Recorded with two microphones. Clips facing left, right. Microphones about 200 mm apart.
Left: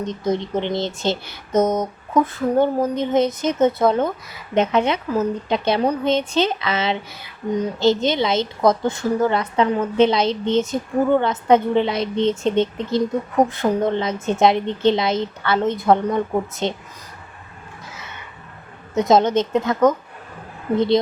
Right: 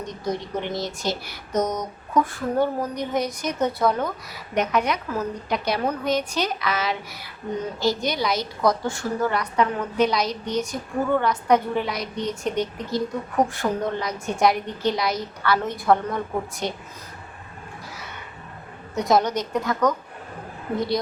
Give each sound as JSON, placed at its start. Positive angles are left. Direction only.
{"t": 0.0, "sound": "a woman's voice", "side_deg": 25}
{"t": 18.9, "sound": "a woman's voice", "side_deg": 25}